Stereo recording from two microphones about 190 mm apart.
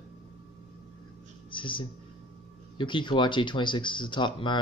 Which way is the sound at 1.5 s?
25° left (ahead or behind).